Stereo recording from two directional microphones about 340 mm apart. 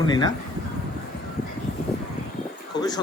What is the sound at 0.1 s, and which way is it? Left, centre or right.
Speech, centre.